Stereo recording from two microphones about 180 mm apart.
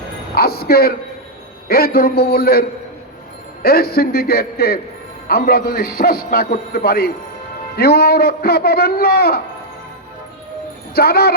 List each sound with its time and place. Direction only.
0.3 s a woman's voice: 60° left (ahead or behind)
10.9 s a man's voice: 60° left (ahead or behind)